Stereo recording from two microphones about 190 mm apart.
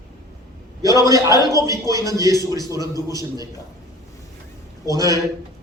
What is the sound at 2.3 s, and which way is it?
A man's voice, 20° left (ahead or behind).